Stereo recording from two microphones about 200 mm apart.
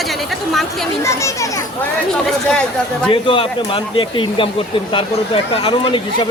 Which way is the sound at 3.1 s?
25° left (ahead or behind).